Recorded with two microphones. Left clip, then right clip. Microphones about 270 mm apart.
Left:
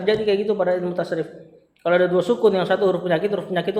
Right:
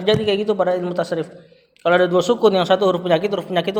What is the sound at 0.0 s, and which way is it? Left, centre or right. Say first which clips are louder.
A man's voice: right 2 dB; right.